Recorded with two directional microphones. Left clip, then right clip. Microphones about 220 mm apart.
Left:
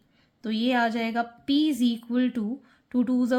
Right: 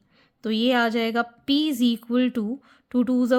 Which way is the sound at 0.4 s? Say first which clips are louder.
Right 3 dB; 35° right (ahead or behind).